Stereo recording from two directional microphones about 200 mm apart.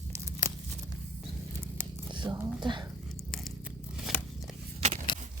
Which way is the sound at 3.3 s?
Centre (ahead or behind).